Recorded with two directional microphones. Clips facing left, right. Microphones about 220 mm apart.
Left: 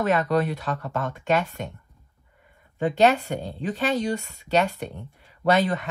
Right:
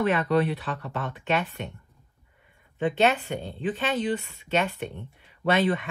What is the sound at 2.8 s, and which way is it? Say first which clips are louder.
Speech: left 3 dB; 40° left (ahead or behind).